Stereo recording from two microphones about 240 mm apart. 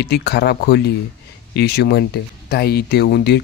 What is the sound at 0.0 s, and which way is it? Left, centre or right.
Speech, left.